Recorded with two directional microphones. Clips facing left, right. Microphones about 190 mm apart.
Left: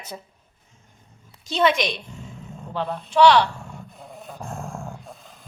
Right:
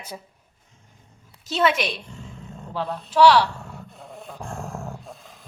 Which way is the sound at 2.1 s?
5° left (ahead or behind).